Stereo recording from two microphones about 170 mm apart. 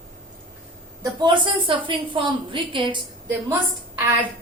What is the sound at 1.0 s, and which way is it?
A woman's voice, 30° right (ahead or behind).